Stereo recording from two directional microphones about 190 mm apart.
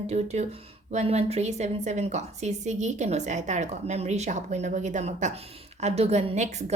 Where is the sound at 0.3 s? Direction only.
35° right (ahead or behind).